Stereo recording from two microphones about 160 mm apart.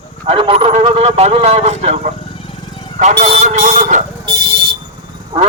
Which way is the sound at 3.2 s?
50° right (ahead or behind).